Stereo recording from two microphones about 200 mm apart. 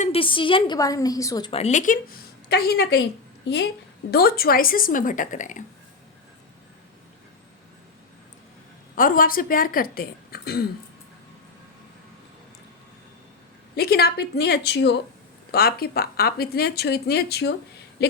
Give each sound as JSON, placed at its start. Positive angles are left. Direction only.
{"t": 0.0, "sound": "a woman's voice", "side_deg": 30}
{"t": 2.5, "sound": "a woman's voice", "side_deg": 55}
{"t": 9.0, "sound": "speech", "side_deg": 45}
{"t": 13.7, "sound": "a woman's voice", "side_deg": 50}